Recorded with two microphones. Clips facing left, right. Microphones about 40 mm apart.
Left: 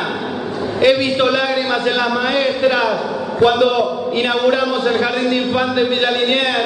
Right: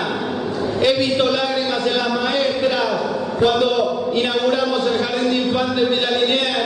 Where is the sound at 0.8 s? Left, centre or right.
Centre.